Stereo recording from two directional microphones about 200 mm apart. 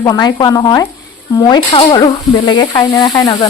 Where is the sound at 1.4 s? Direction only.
20° left (ahead or behind).